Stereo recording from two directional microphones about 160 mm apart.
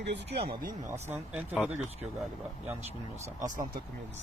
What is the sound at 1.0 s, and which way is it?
Speech, 10° right (ahead or behind).